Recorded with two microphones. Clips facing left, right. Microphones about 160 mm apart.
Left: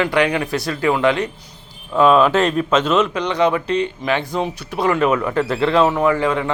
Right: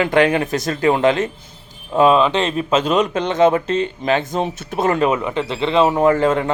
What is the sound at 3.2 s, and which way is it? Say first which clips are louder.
A man's voice: right 3 dB; 45° right (ahead or behind).